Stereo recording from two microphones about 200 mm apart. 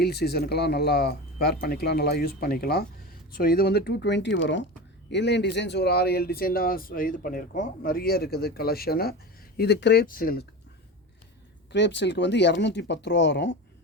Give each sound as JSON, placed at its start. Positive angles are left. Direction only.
{"t": 0.0, "sound": "speech", "side_deg": 55}
{"t": 11.7, "sound": "speech", "side_deg": 60}